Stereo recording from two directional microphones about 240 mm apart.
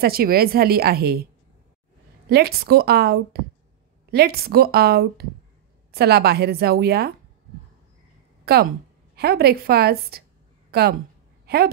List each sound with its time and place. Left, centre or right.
0.0 s a woman's voice: right
8.5 s a woman's voice: right